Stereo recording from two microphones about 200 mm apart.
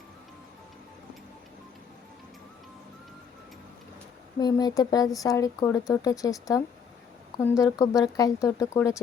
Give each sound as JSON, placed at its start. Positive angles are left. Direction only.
{"t": 4.4, "sound": "speech", "side_deg": 20}